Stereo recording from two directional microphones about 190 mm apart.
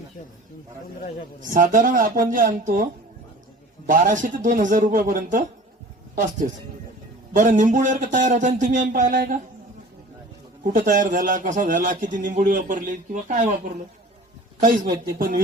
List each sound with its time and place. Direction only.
1.4 s a man's voice: 45° right (ahead or behind)
10.6 s a man's voice: 45° right (ahead or behind)
14.9 s a man's voice: 50° right (ahead or behind)